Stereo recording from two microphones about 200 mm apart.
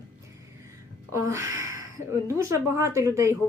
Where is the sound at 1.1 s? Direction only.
15° right (ahead or behind).